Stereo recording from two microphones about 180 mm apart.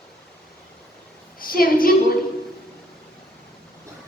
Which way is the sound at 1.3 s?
55° left (ahead or behind).